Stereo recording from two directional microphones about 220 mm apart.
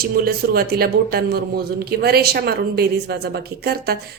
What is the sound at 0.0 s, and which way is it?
A woman's voice, 45° right (ahead or behind).